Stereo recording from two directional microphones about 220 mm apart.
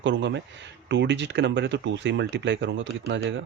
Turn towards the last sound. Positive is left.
turn(degrees=-55)  # may be behind; listen again after turning